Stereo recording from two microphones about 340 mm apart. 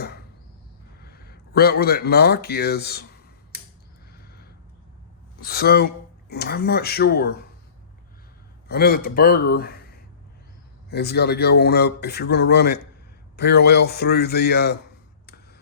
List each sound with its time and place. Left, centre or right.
1.0 s speech: left
5.4 s speech: left
8.6 s speech: left
10.8 s speech: left